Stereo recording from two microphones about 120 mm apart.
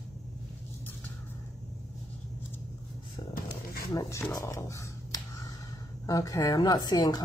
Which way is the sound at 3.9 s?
25° left (ahead or behind).